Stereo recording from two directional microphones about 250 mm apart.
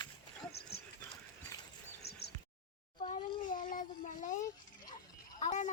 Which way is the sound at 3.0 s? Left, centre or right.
Left.